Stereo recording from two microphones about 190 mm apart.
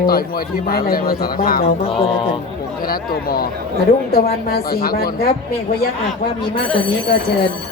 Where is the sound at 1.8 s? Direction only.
30° left (ahead or behind).